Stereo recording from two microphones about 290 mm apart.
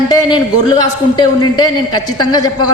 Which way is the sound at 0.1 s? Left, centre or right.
Centre.